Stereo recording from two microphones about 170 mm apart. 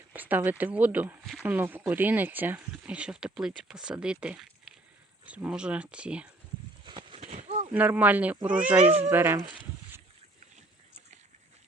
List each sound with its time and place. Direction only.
0.1 s speech: 10° right (ahead or behind)
1.5 s speech: 10° right (ahead or behind)
6.8 s a sound: 25° right (ahead or behind)
7.2 s a sound: 40° right (ahead or behind)
7.7 s speech: 10° right (ahead or behind)
8.8 s speech: 35° right (ahead or behind)
9.0 s speech: 10° right (ahead or behind)